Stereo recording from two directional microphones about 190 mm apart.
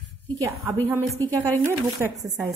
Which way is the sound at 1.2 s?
10° left (ahead or behind).